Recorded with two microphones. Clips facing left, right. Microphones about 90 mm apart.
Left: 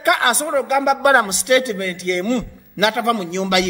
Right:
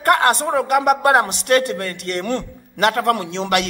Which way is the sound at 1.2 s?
45° right (ahead or behind).